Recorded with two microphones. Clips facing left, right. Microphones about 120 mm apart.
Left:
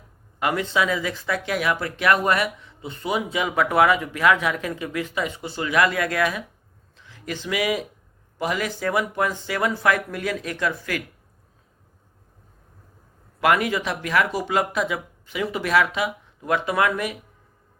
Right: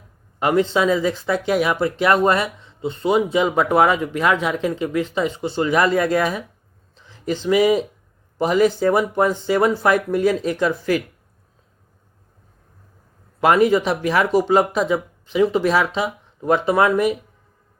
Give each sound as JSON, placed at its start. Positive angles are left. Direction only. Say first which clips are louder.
{"t": 0.3, "sound": "a man's voice", "louder": "right 5 dB", "side_deg": -25}
{"t": 13.4, "sound": "speech", "louder": "right 6 dB", "side_deg": -30}